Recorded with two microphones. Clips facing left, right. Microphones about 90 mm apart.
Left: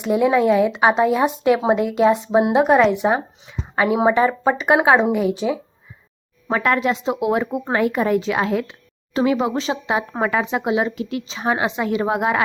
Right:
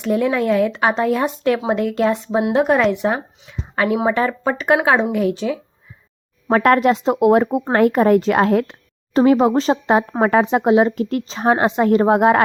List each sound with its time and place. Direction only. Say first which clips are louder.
0.0 s speech: left 2 dB; 10° left (ahead or behind)
6.5 s speech: right 5 dB; 55° right (ahead or behind)